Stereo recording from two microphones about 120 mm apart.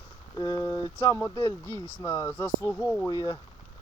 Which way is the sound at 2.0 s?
20° left (ahead or behind).